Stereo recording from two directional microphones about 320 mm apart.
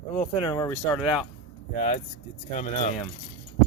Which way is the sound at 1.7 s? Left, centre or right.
Left.